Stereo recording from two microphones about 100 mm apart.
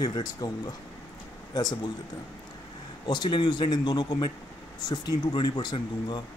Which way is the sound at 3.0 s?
45° left (ahead or behind).